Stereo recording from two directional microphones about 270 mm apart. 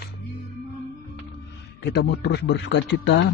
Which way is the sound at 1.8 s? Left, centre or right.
Left.